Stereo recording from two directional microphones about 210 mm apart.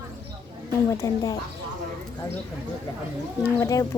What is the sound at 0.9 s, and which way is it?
Speech, 15° left (ahead or behind).